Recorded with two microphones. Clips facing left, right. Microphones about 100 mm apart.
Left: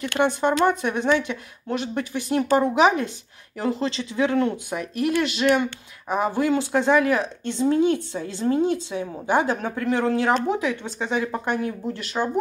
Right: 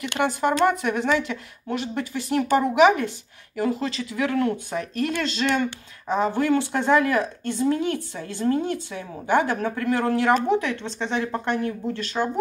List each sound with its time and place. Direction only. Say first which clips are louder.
0.2 s speech: left 1 dB; 25° left (ahead or behind)